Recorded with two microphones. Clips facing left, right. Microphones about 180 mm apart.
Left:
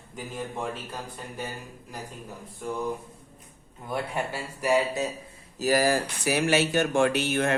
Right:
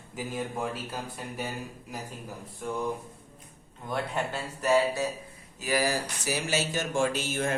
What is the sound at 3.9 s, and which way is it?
Speech, 10° left (ahead or behind).